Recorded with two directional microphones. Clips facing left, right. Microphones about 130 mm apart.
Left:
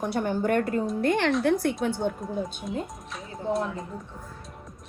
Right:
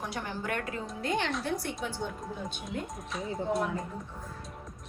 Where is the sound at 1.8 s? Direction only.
55° left (ahead or behind).